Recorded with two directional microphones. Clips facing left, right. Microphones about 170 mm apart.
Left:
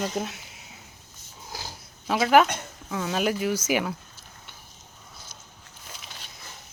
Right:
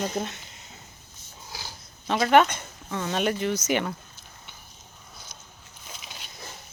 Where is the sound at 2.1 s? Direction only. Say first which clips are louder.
Even; 5° left (ahead or behind).